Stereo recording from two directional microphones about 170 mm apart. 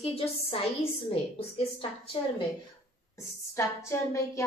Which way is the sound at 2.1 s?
30° left (ahead or behind).